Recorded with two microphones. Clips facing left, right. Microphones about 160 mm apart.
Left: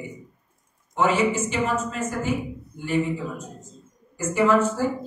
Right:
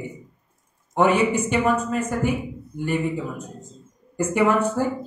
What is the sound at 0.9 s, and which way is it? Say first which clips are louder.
Speech: right 3 dB; 60° right (ahead or behind).